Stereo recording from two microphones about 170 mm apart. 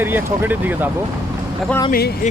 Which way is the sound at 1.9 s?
65° left (ahead or behind).